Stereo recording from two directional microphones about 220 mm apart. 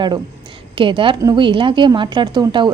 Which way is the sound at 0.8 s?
25° right (ahead or behind).